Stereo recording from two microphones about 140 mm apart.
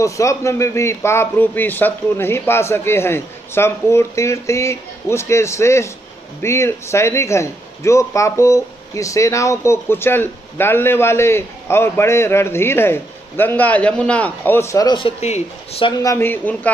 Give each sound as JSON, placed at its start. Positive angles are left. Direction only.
{"t": 0.0, "sound": "speech", "side_deg": 20}
{"t": 15.0, "sound": "speech", "side_deg": 45}
{"t": 16.0, "sound": "speech", "side_deg": 20}